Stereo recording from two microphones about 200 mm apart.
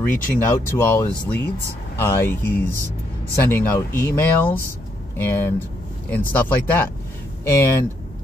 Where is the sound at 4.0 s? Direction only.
10° left (ahead or behind).